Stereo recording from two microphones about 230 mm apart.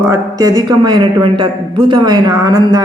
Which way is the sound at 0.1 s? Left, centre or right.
Centre.